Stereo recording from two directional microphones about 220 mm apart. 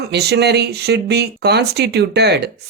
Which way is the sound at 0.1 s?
50° right (ahead or behind).